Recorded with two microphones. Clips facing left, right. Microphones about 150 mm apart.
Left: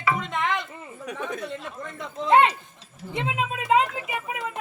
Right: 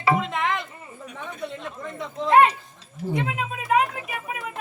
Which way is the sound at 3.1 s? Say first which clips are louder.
Right 1 dB; 25° left (ahead or behind).